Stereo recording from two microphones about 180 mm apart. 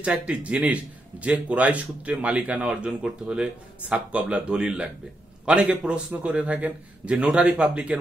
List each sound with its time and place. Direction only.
0.0 s speech: 5° right (ahead or behind)